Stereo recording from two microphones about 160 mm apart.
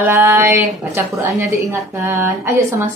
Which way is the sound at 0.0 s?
15° right (ahead or behind).